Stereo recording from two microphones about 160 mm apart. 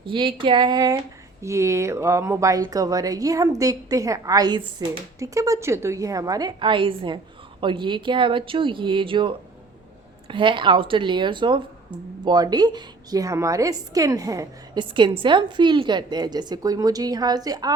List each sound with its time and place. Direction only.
0.0 s speech: 30° right (ahead or behind)